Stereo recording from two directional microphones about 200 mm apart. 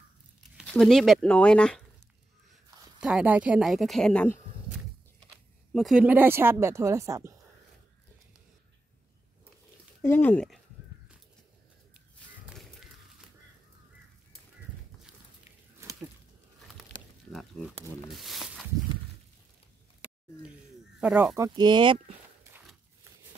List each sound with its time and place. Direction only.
0.6 s speech: centre (ahead or behind)
3.0 s speech: 5° right (ahead or behind)
5.7 s speech: centre (ahead or behind)
10.0 s speech: 10° left (ahead or behind)
12.4 s a sound: centre (ahead or behind)
16.6 s a sound: centre (ahead or behind)
21.0 s speech: 5° right (ahead or behind)
21.5 s speech: 20° right (ahead or behind)